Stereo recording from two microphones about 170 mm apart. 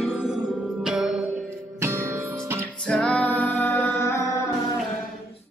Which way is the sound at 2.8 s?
5° left (ahead or behind).